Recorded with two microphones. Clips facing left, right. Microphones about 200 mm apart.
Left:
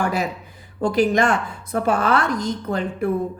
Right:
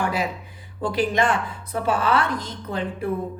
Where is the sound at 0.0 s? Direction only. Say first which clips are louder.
Left 2 dB; 45° left (ahead or behind).